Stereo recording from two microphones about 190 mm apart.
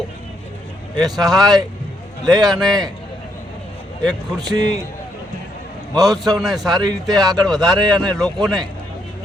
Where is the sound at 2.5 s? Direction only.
Centre (ahead or behind).